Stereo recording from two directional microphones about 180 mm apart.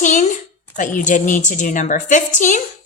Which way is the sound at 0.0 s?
45° left (ahead or behind).